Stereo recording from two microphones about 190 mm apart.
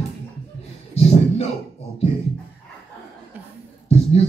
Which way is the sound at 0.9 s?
35° left (ahead or behind).